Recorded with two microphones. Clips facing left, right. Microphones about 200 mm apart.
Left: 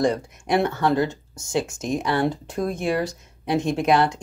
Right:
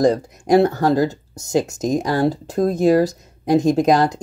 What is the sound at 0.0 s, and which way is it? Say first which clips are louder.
Speech: right 5 dB; 40° right (ahead or behind).